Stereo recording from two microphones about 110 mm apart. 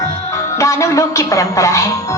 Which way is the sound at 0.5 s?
25° left (ahead or behind).